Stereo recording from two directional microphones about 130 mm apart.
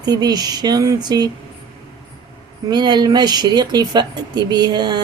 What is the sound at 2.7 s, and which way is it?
Speech, 35° right (ahead or behind).